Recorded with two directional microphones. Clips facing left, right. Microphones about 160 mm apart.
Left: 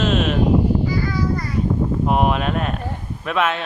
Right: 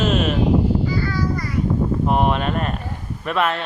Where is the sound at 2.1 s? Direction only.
5° left (ahead or behind).